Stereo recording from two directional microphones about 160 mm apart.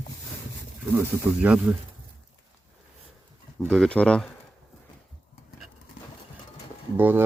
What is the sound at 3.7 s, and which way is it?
Speech, 5° left (ahead or behind).